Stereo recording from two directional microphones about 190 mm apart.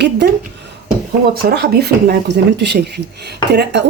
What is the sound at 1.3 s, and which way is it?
Speech, 55° right (ahead or behind).